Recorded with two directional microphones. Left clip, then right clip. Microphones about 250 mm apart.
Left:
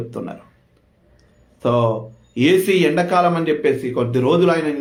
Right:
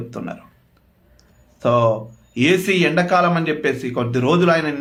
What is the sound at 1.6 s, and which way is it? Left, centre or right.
A man's voice, centre.